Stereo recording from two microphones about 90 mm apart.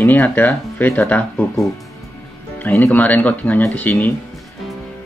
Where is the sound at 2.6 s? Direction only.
25° left (ahead or behind).